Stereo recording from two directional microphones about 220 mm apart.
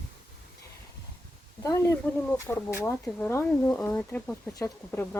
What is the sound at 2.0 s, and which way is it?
Speech, 10° left (ahead or behind).